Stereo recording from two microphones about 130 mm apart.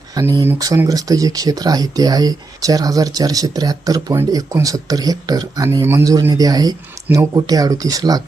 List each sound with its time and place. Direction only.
0.1 s speech: 30° right (ahead or behind)